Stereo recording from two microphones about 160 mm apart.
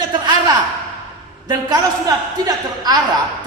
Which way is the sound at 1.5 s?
25° right (ahead or behind).